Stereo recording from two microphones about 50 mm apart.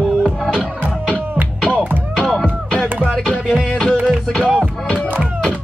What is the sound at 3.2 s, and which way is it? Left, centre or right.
Music, centre.